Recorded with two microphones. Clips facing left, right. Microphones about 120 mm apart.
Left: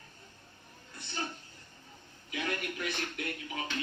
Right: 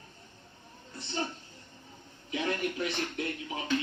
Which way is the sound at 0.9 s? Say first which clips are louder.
Right 4 dB; 25° right (ahead or behind).